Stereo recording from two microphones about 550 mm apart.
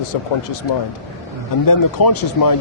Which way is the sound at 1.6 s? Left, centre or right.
Left.